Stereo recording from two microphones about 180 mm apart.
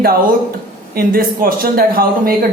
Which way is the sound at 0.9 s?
55° right (ahead or behind).